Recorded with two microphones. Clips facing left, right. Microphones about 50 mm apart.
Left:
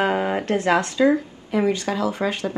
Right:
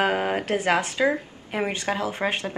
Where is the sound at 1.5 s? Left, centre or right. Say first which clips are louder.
Left 5 dB; right.